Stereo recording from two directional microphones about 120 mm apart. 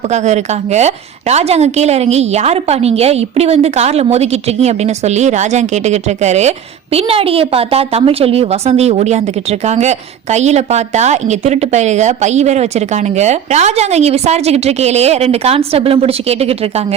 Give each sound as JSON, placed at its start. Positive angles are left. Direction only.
{"t": 0.1, "sound": "a woman's voice", "side_deg": -70}
{"t": 6.9, "sound": "a woman's voice", "side_deg": -55}